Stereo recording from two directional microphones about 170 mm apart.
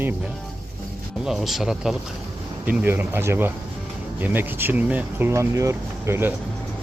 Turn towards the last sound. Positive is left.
turn(degrees=-15)  # may be behind; listen again after turning